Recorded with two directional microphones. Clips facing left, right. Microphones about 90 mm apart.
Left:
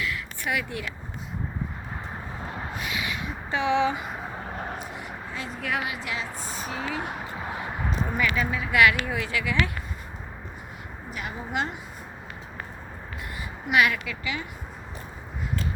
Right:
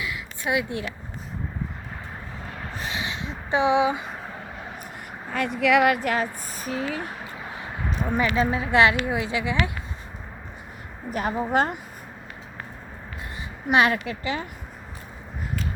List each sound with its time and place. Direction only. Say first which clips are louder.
0.0 s a sound: right 1 dB; 20° right (ahead or behind)
2.7 s a sound: right 2 dB; 30° right (ahead or behind); by 4.0 s 15° right (ahead or behind)
4.8 s speech: left 2 dB; 55° right (ahead or behind)
8.1 s speech: right 6 dB; 30° right (ahead or behind)
11.1 s a woman's voice: right 9 dB; 40° right (ahead or behind)
13.7 s speech: right 3 dB; 35° right (ahead or behind)